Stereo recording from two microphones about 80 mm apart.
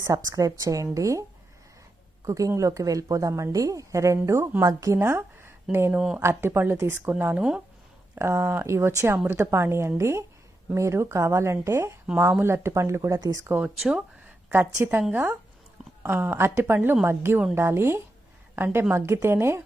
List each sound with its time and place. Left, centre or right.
0.0 s a woman's voice: right
2.2 s a woman's voice: right
5.9 s speech: centre
6.1 s a woman's voice: right
13.7 s speech: centre
14.5 s a woman's voice: right